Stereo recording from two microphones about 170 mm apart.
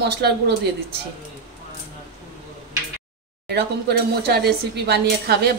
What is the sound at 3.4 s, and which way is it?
A woman's voice, 70° right (ahead or behind).